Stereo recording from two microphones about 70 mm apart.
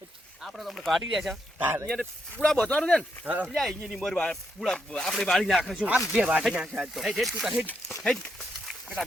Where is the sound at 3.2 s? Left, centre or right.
Right.